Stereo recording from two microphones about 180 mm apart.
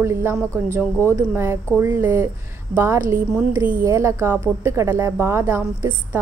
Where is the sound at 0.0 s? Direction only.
15° right (ahead or behind).